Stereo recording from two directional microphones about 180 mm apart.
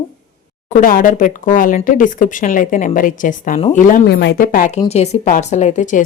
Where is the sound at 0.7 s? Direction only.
50° left (ahead or behind).